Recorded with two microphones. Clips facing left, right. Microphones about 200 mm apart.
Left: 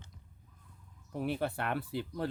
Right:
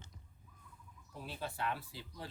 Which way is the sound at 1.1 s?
65° left (ahead or behind).